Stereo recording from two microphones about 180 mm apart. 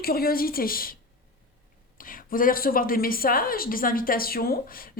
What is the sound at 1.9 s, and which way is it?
A woman's voice, 50° left (ahead or behind).